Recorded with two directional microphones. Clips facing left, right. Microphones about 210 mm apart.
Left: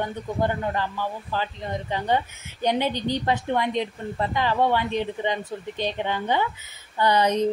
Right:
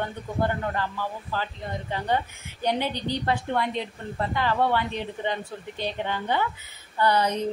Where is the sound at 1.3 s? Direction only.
20° left (ahead or behind).